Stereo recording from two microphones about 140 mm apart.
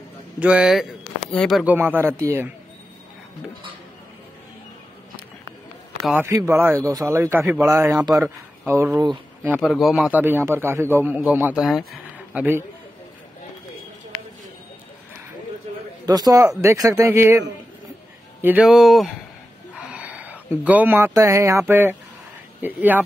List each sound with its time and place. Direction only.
0.4 s a man's voice: 5° right (ahead or behind)
1.6 s a man's voice: 10° right (ahead or behind)
6.1 s a man's voice: 20° right (ahead or behind)
9.6 s a man's voice: centre (ahead or behind)
10.2 s a man's voice: 15° right (ahead or behind)
12.4 s a man's voice: 15° right (ahead or behind)
16.1 s speech: 25° right (ahead or behind)
18.4 s speech: 10° right (ahead or behind)
18.7 s a man's voice: centre (ahead or behind)
19.9 s a sound: 10° right (ahead or behind)
21.1 s a man's voice: 20° right (ahead or behind)